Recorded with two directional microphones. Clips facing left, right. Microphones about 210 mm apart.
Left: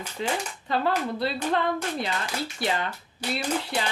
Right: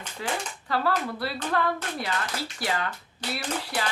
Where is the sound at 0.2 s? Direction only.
20° left (ahead or behind).